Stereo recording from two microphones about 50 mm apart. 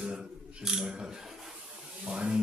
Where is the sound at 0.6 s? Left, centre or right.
Centre.